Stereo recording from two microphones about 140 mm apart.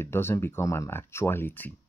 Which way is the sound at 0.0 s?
15° left (ahead or behind).